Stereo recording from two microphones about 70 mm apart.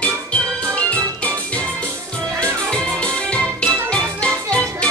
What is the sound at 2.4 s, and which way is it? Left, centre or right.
Music, centre.